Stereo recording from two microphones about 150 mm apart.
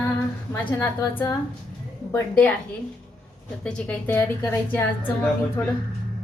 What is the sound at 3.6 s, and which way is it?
A woman's voice, 10° left (ahead or behind).